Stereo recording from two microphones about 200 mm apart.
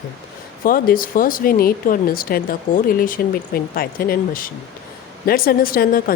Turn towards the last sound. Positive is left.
turn(degrees=45)  # may be behind; listen again after turning